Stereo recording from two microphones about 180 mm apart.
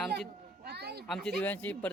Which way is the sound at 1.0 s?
5° left (ahead or behind).